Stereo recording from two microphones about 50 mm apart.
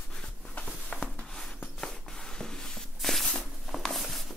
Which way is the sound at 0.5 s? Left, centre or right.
Left.